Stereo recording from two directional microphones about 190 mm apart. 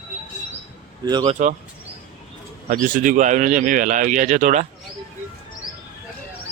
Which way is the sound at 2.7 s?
45° right (ahead or behind).